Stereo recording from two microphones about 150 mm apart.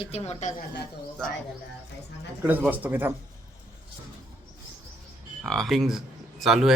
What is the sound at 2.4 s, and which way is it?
Speech, 10° right (ahead or behind).